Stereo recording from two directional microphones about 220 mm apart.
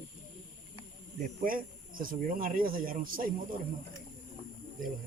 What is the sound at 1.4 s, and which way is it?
Speech, 40° right (ahead or behind).